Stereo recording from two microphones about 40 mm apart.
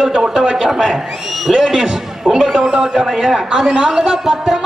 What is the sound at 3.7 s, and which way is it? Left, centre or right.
Speech, right.